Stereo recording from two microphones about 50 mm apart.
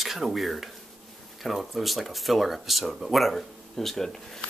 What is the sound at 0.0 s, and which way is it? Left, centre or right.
Speech, centre.